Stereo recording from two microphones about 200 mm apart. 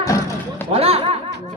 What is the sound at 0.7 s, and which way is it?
Speech, 30° right (ahead or behind).